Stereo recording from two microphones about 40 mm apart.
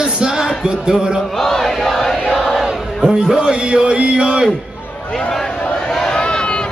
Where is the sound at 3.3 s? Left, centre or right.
Centre.